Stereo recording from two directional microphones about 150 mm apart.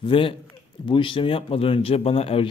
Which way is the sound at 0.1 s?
35° left (ahead or behind).